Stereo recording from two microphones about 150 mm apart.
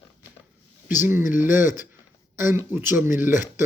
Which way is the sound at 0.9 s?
15° right (ahead or behind).